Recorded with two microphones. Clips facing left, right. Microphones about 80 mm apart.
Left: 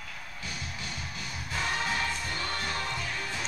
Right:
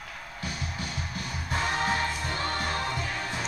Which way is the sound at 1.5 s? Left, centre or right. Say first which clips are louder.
Right 4 dB; right.